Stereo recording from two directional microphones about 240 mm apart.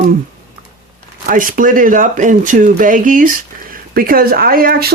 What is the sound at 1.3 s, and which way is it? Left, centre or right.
Speech, right.